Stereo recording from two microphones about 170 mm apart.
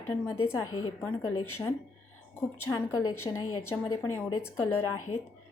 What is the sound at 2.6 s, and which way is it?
Speech, 15° left (ahead or behind).